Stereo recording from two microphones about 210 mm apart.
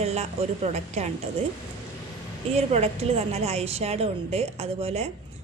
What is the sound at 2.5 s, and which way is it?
A woman's voice, 30° right (ahead or behind).